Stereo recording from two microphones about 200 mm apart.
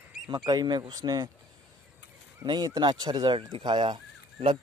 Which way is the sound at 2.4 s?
20° right (ahead or behind).